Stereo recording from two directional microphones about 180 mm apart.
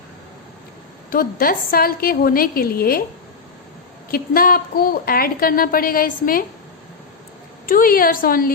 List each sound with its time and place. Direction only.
1.1 s a woman's voice: 55° left (ahead or behind)
4.1 s a woman's voice: 55° left (ahead or behind)
7.7 s a woman's voice: 50° left (ahead or behind)